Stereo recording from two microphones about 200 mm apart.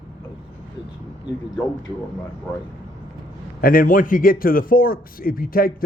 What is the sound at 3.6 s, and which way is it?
A man's voice, 45° left (ahead or behind).